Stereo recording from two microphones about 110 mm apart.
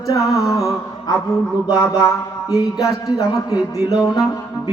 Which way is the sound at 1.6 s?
35° left (ahead or behind).